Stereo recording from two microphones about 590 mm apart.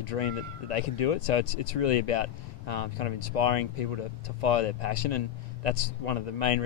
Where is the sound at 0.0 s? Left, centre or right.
Left.